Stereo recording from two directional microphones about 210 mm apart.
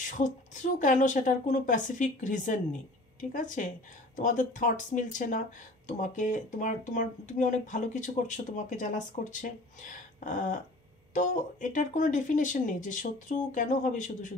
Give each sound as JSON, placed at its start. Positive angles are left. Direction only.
{"t": 0.0, "sound": "speech", "side_deg": 35}